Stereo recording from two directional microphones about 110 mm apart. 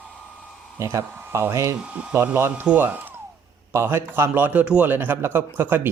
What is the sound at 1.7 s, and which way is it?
A man's voice, 10° right (ahead or behind).